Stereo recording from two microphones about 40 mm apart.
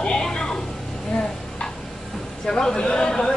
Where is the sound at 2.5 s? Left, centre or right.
Centre.